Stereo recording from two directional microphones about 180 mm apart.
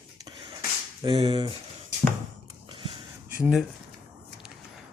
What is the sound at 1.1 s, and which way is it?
Speech, 30° right (ahead or behind).